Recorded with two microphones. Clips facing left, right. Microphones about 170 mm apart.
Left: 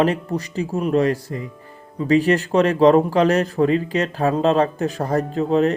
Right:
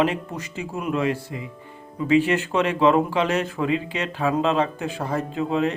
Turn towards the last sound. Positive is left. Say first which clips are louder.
# left 5 dB
turn(degrees=40)  # may be behind; listen again after turning